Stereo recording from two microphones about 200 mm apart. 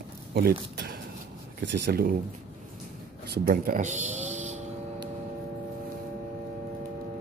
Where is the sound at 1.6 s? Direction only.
55° right (ahead or behind).